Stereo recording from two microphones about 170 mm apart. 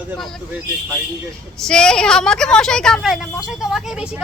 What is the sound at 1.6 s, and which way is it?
A woman's voice, 5° left (ahead or behind).